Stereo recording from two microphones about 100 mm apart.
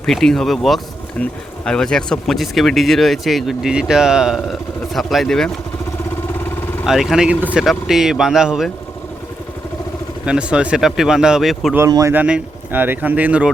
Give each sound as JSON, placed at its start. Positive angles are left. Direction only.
{"t": 0.0, "sound": "speech", "side_deg": 5}
{"t": 6.8, "sound": "speech", "side_deg": 0}
{"t": 10.2, "sound": "speech", "side_deg": -10}
{"t": 11.9, "sound": "speech", "side_deg": -35}
{"t": 12.1, "sound": "speech", "side_deg": -15}